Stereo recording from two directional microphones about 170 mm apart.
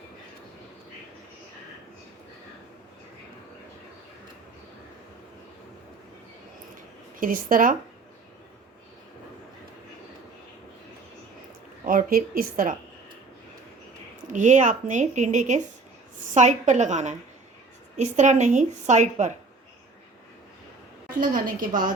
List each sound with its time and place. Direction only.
7.2 s a woman's voice: 55° right (ahead or behind)
11.9 s a woman's voice: 55° right (ahead or behind)
14.3 s a woman's voice: 50° right (ahead or behind)
21.2 s a woman's voice: 55° right (ahead or behind)